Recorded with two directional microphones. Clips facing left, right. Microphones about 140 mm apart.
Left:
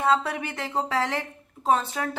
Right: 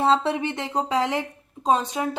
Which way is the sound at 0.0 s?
25° right (ahead or behind).